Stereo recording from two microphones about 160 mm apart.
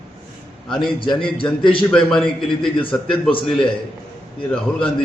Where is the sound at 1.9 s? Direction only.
5° left (ahead or behind).